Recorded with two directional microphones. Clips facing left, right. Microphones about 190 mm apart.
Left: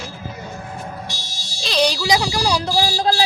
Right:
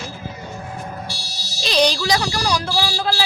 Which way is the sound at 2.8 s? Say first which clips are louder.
Left 3 dB; 40° left (ahead or behind).